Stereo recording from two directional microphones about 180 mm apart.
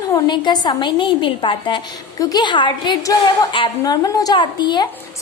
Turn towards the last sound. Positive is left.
turn(degrees=25)  # may be behind; listen again after turning